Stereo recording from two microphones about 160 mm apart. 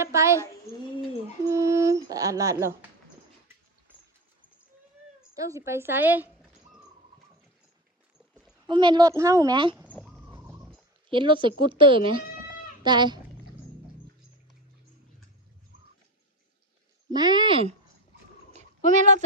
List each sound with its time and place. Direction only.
0.0 s a woman's voice: 15° right (ahead or behind)
0.4 s speech: 20° left (ahead or behind)
1.5 s a sound: 20° right (ahead or behind)
5.3 s a woman's voice: 20° right (ahead or behind)
8.6 s a woman's voice: 30° right (ahead or behind)
10.0 s pig: 5° right (ahead or behind)
11.1 s speech: 30° right (ahead or behind)
17.2 s a woman's voice: 25° right (ahead or behind)
18.5 s a sound: 45° right (ahead or behind)